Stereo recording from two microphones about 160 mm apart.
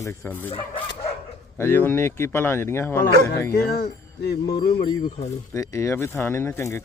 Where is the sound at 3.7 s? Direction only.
90° left.